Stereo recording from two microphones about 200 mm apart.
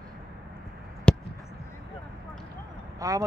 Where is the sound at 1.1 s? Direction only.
5° left (ahead or behind).